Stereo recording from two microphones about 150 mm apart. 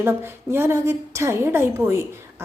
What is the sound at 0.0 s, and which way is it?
A woman's voice, 15° right (ahead or behind).